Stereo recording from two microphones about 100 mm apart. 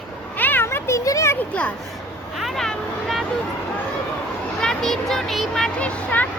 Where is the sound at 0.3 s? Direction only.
20° left (ahead or behind).